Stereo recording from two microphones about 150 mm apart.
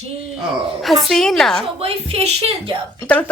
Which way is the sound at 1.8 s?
40° right (ahead or behind).